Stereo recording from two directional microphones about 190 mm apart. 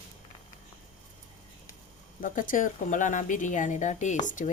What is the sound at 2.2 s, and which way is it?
Speech, 45° left (ahead or behind).